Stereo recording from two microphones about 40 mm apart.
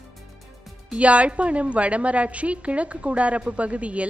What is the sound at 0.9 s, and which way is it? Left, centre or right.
A woman's voice, right.